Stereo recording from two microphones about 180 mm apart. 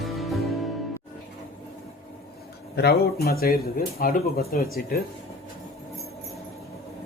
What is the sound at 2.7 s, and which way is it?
Speech, 60° left (ahead or behind).